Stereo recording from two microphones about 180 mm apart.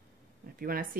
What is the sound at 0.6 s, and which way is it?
Speech, 55° right (ahead or behind).